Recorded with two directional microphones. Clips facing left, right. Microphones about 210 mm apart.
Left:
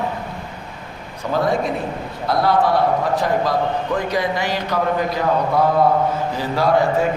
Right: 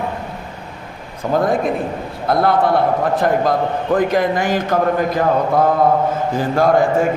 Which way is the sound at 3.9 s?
50° right (ahead or behind).